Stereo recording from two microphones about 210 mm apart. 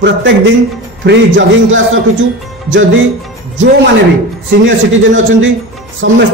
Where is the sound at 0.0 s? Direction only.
60° right (ahead or behind).